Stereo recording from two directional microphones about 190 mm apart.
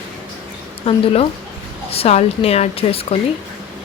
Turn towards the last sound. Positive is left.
turn(degrees=30)  # may be behind; listen again after turning